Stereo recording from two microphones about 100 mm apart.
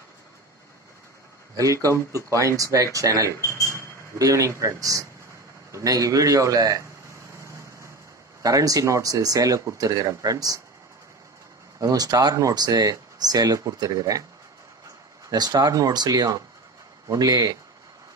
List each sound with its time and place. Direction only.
1.6 s speech: 35° right (ahead or behind)
3.3 s a sound: 30° left (ahead or behind)
4.2 s speech: 30° right (ahead or behind)
7.3 s vehicle: 30° right (ahead or behind)
8.4 s speech: 35° right (ahead or behind)
11.8 s speech: 40° right (ahead or behind)
15.2 s speech: 45° right (ahead or behind)